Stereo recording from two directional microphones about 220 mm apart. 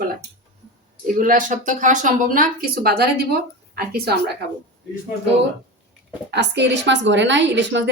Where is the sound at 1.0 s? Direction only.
35° right (ahead or behind).